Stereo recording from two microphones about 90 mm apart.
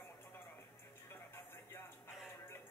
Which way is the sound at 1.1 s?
25° left (ahead or behind).